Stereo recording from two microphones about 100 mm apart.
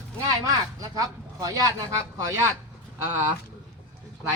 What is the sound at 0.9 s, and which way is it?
Speech, 40° right (ahead or behind).